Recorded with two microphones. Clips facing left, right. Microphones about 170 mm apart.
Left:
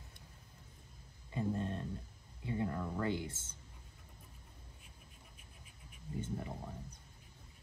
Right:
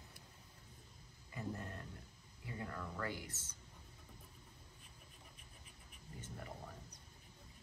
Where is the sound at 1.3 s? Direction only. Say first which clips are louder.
Left 8 dB; 25° left (ahead or behind).